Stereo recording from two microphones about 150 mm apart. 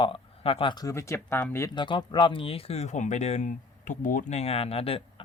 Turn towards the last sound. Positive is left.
turn(degrees=40)  # may be behind; listen again after turning